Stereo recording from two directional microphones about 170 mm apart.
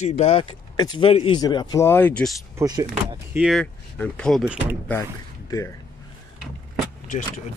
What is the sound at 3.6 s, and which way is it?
Speech, 5° left (ahead or behind).